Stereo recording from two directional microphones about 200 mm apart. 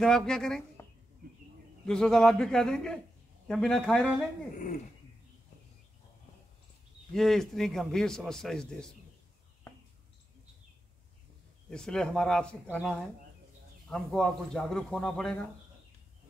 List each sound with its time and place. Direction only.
0.0 s a man's voice: 5° left (ahead or behind)
1.9 s a man's voice: 5° left (ahead or behind)
4.6 s a sound: 40° left (ahead or behind)
7.2 s a man's voice: centre (ahead or behind)
11.7 s a man's voice: 5° left (ahead or behind)